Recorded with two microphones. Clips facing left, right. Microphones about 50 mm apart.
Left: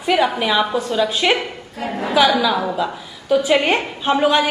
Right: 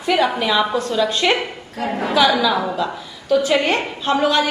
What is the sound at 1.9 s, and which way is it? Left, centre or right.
Speech, right.